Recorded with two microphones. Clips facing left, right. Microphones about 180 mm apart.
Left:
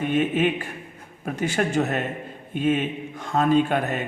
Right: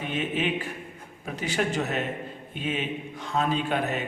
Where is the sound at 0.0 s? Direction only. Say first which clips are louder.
Left 7 dB; 50° left (ahead or behind).